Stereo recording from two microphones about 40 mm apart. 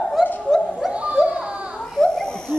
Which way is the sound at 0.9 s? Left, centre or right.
Right.